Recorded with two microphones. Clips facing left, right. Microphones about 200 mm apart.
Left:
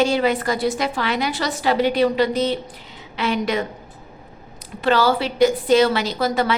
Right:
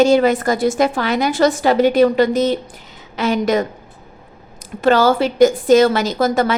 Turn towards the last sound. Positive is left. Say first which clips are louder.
# right 4 dB
turn(degrees=-45)  # may be behind; listen again after turning